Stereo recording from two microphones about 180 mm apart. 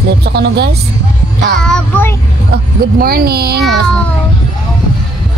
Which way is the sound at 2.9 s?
55° right (ahead or behind).